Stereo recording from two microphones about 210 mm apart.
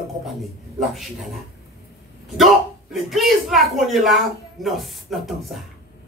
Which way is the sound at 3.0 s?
Centre (ahead or behind).